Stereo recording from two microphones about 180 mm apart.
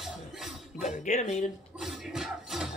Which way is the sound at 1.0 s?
40° left (ahead or behind).